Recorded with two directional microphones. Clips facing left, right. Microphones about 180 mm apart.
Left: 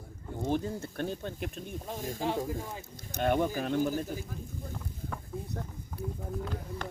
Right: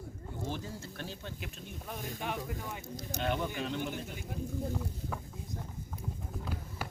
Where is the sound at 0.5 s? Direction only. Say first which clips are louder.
Left 9 dB; 55° left (ahead or behind).